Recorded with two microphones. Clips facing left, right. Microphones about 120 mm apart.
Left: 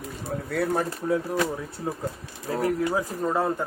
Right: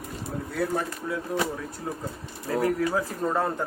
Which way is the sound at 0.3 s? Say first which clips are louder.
Left 2 dB; 60° left (ahead or behind).